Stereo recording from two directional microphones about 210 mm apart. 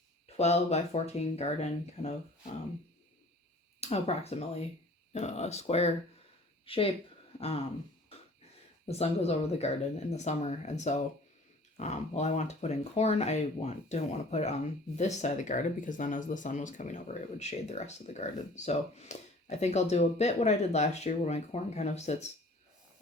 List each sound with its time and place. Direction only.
0.3 s speech: 30° left (ahead or behind)
3.8 s speech: 30° left (ahead or behind)
7.3 s a sound: 30° left (ahead or behind)
8.9 s speech: 30° left (ahead or behind)